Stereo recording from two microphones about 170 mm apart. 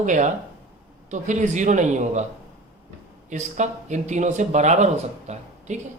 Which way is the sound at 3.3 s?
45° right (ahead or behind).